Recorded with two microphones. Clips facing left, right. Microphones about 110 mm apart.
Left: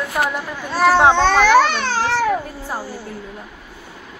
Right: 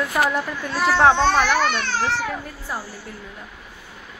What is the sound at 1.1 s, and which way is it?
Speech, 90° left.